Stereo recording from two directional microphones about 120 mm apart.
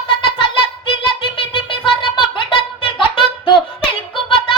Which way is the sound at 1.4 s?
45° left (ahead or behind).